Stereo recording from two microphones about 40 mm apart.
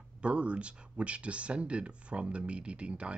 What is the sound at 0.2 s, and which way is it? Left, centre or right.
Speech, right.